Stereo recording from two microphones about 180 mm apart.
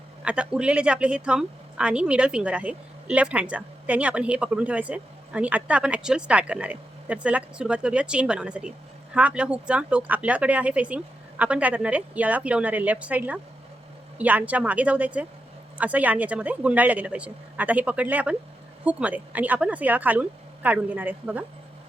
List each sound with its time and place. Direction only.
0.3 s a woman's voice: 5° right (ahead or behind)